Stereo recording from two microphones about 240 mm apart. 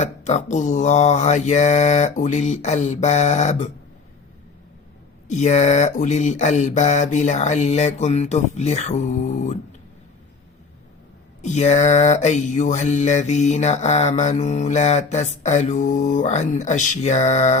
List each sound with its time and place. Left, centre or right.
0.0 s mantra: left
5.3 s mantra: left
11.4 s mantra: left